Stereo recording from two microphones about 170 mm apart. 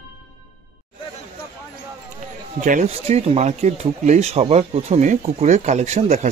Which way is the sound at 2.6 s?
45° right (ahead or behind).